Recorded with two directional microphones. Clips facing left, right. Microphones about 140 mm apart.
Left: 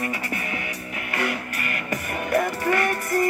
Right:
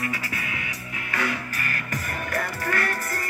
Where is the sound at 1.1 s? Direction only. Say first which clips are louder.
Left 1 dB; 20° left (ahead or behind).